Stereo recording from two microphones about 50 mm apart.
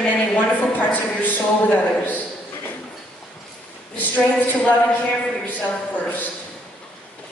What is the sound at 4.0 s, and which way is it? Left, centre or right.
A woman's voice, left.